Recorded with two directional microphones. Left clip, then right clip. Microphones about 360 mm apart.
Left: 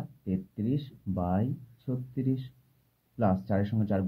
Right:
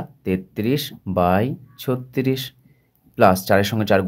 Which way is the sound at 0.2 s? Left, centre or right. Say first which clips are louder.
Right 12 dB; right.